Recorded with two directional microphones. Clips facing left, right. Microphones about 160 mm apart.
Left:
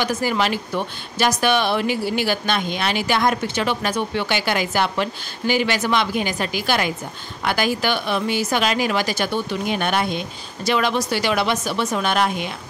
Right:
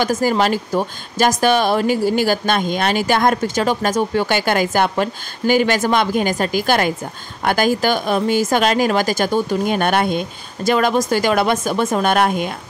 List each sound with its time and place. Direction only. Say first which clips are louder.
0.0 s speech: right 5 dB; 45° right (ahead or behind)